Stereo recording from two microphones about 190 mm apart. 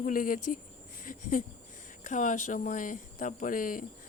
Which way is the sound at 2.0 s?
40° left (ahead or behind).